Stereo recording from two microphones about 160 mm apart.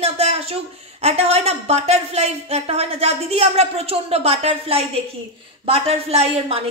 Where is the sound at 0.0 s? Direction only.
40° right (ahead or behind).